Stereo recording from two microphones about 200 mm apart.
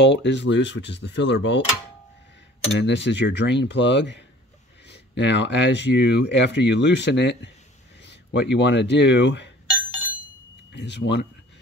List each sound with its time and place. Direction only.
0.0 s speech: 60° left (ahead or behind)
2.8 s speech: 60° left (ahead or behind)
10.7 s speech: 60° left (ahead or behind)